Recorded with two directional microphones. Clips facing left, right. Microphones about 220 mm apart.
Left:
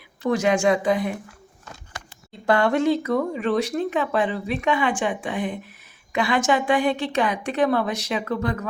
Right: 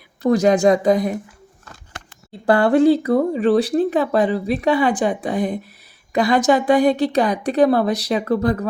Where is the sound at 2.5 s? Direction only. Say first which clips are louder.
Right 6 dB; 35° right (ahead or behind).